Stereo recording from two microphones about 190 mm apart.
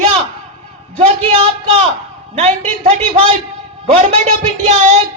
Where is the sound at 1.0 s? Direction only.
35° right (ahead or behind).